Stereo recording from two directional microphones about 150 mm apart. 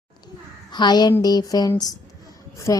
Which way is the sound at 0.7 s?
30° left (ahead or behind).